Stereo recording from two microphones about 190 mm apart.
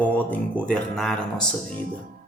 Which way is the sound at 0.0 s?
10° left (ahead or behind).